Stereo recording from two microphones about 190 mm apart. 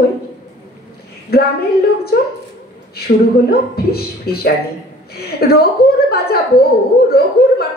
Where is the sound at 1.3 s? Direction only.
55° left (ahead or behind).